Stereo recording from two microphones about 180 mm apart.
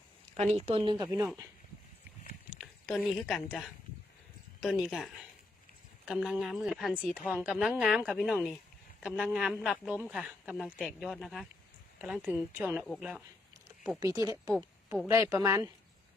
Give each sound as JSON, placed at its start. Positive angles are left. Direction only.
{"t": 0.3, "sound": "speech", "side_deg": -40}
{"t": 2.6, "sound": "speech", "side_deg": 0}
{"t": 4.6, "sound": "speech", "side_deg": 0}
{"t": 14.0, "sound": "speech", "side_deg": -20}